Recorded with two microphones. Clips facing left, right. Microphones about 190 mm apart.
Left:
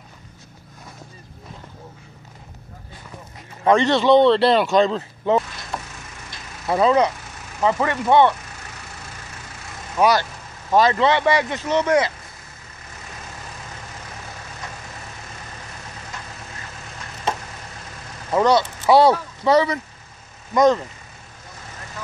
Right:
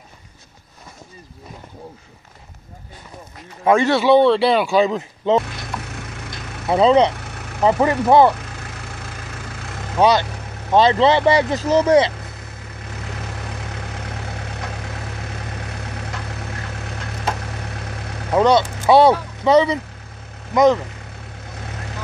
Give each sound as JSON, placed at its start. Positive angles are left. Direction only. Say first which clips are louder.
{"t": 3.6, "sound": "speech", "louder": "right 1 dB", "side_deg": -10}
{"t": 5.4, "sound": "vehicle", "louder": "right 2 dB", "side_deg": -65}
{"t": 6.7, "sound": "speech", "louder": "right 3 dB", "side_deg": -25}
{"t": 7.2, "sound": "vehicle", "louder": "right 6 dB", "side_deg": -65}
{"t": 7.6, "sound": "speech", "louder": "right 4 dB", "side_deg": -30}
{"t": 9.9, "sound": "speech", "louder": "right 2 dB", "side_deg": -25}
{"t": 12.8, "sound": "vehicle", "louder": "right 7 dB", "side_deg": -70}
{"t": 18.3, "sound": "speech", "louder": "right 2 dB", "side_deg": -20}